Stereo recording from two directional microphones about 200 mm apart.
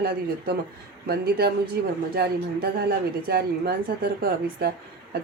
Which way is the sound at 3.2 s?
50° right (ahead or behind).